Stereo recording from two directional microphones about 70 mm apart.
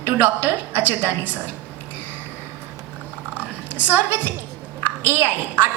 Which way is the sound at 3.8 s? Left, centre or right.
Right.